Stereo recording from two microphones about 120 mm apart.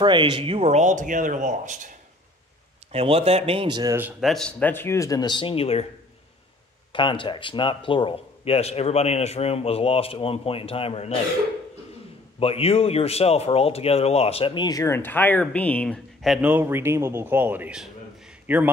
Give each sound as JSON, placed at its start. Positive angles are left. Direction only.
{"t": 0.0, "sound": "speech", "side_deg": -40}
{"t": 0.6, "sound": "speech", "side_deg": -70}
{"t": 2.9, "sound": "a man's voice", "side_deg": -55}
{"t": 3.6, "sound": "speech", "side_deg": -35}
{"t": 4.2, "sound": "speech", "side_deg": 5}
{"t": 6.9, "sound": "a man's voice", "side_deg": 45}
{"t": 12.4, "sound": "speech", "side_deg": 55}
{"t": 15.0, "sound": "speech", "side_deg": 15}
{"t": 16.3, "sound": "a man's voice", "side_deg": -15}
{"t": 17.7, "sound": "a sound", "side_deg": -10}